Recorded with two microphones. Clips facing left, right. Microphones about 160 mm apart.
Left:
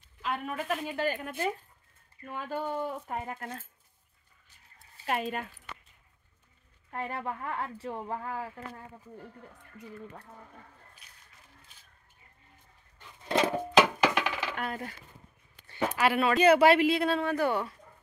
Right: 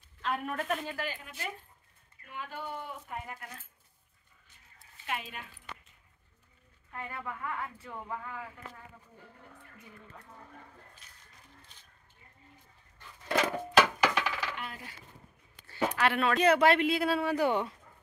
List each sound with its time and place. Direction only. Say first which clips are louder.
0.2 s speech: even; centre (ahead or behind)
1.0 s speech: left 9 dB; 50° left (ahead or behind)
2.2 s speech: left 6 dB; 40° left (ahead or behind)
5.0 s speech: left 7 dB; 45° left (ahead or behind)
6.9 s speech: left 5 dB; 35° left (ahead or behind)
13.2 s music: left 3 dB; 25° left (ahead or behind)
14.5 s coin: left 7 dB; 50° left (ahead or behind)
16.0 s speech: left 3 dB; 5° left (ahead or behind); by 17.6 s 15° right (ahead or behind)